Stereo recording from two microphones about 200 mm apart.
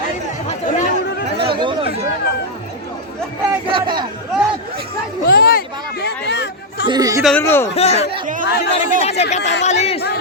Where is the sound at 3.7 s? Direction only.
25° right (ahead or behind).